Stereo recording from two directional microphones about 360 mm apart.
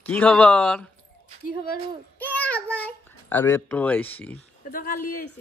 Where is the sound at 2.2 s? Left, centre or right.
Centre.